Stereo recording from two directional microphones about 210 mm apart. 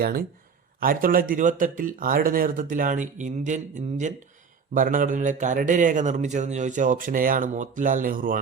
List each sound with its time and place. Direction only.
0.0 s a man's voice: 45° right (ahead or behind)